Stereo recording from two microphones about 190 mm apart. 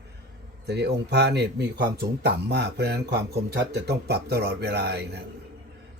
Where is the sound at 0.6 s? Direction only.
60° right (ahead or behind).